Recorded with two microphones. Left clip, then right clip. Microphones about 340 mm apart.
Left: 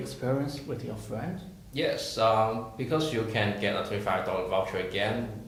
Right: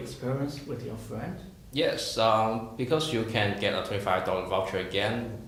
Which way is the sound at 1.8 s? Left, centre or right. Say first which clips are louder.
Right 1 dB; right.